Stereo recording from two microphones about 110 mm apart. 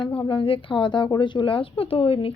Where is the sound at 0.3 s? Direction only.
50° left (ahead or behind).